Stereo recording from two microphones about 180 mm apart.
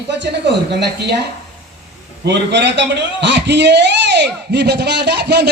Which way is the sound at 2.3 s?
75° right (ahead or behind).